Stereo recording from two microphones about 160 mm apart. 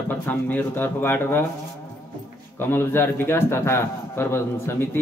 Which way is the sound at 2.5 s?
15° left (ahead or behind).